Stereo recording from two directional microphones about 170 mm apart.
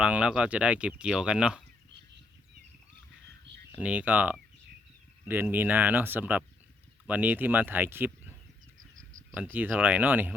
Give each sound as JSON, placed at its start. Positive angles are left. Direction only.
{"t": 0.0, "sound": "speech", "side_deg": -5}
{"t": 3.7, "sound": "speech", "side_deg": -10}
{"t": 9.3, "sound": "speech", "side_deg": -10}